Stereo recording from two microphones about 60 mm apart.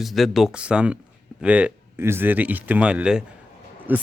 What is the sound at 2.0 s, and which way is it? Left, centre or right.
Speech, right.